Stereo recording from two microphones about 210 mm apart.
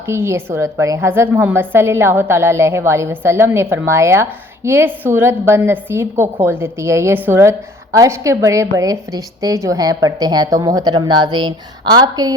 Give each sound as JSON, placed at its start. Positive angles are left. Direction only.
{"t": 0.0, "sound": "a woman's voice", "side_deg": -10}